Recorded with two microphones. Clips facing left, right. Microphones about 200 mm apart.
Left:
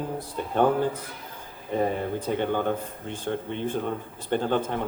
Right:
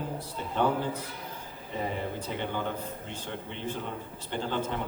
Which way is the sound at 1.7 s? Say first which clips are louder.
Left 7 dB; 50° left (ahead or behind).